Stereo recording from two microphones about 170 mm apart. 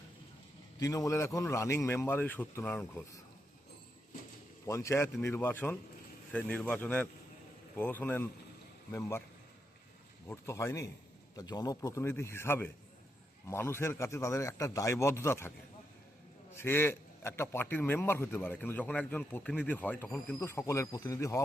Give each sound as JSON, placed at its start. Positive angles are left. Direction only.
{"t": 0.8, "sound": "a man's voice", "side_deg": 20}
{"t": 4.6, "sound": "a man's voice", "side_deg": 20}
{"t": 10.2, "sound": "a man's voice", "side_deg": 15}
{"t": 16.6, "sound": "a man's voice", "side_deg": 15}